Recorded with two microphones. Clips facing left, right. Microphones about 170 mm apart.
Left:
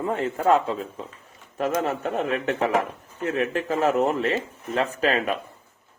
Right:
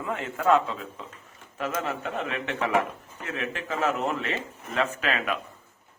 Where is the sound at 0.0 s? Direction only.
35° left (ahead or behind).